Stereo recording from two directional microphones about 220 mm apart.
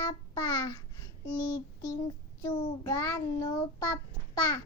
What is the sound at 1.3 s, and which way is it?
A child's voice, 20° left (ahead or behind).